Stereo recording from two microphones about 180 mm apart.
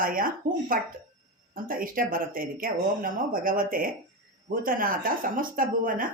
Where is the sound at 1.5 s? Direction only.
50° right (ahead or behind).